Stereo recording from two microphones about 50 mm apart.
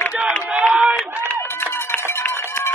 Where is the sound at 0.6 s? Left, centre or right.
Right.